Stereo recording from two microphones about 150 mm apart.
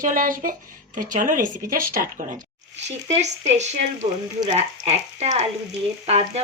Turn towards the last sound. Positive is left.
turn(degrees=-45)  # may be behind; listen again after turning